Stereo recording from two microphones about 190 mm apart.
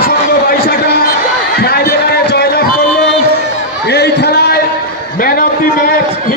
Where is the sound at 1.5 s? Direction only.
55° left (ahead or behind).